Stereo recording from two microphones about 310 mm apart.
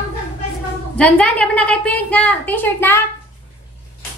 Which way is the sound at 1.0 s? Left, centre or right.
Centre.